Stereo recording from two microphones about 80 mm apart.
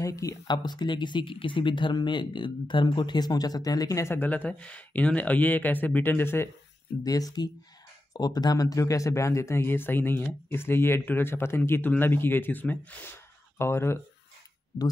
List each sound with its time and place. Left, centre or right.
0.0 s speech: left
0.5 s speech: left
4.1 s speech: left
7.0 s speech: left
13.6 s speech: left
14.7 s speech: left